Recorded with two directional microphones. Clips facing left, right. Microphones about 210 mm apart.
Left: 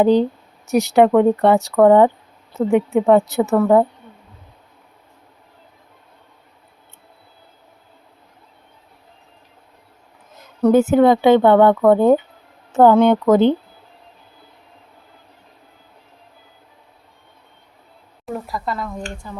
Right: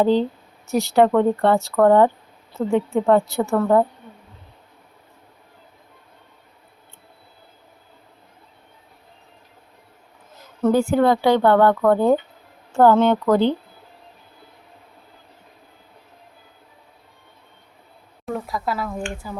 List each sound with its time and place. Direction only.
0.0 s a woman's voice: 15° left (ahead or behind)
10.6 s speech: 20° left (ahead or behind)
18.3 s speech: centre (ahead or behind)